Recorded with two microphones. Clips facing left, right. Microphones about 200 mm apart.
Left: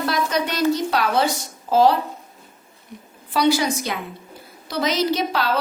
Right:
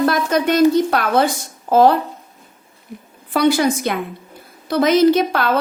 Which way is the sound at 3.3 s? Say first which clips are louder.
Right 4 dB; 55° right (ahead or behind).